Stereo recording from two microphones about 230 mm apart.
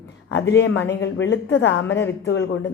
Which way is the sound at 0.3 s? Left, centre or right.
Left.